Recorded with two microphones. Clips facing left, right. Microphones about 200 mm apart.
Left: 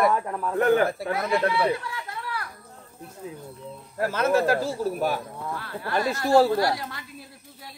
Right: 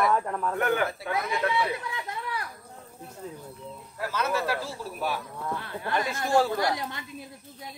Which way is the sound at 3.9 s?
50° left (ahead or behind).